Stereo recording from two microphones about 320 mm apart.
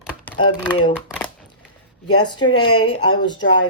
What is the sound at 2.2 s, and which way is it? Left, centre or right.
Speech, centre.